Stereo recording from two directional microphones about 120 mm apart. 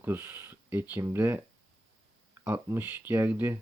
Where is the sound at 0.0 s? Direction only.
15° right (ahead or behind).